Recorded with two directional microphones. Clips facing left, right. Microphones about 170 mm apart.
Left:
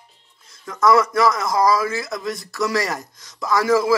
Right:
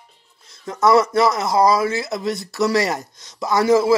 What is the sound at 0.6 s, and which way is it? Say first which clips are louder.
Speech: right 1 dB; 25° right (ahead or behind).